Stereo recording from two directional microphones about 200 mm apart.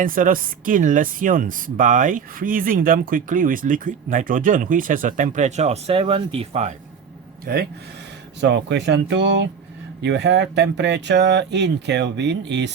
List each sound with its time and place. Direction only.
0.0 s speech: 45° right (ahead or behind)
7.4 s speech: 50° right (ahead or behind)